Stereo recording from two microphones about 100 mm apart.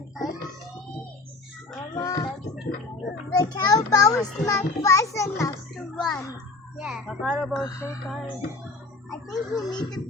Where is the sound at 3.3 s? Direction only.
40° left (ahead or behind).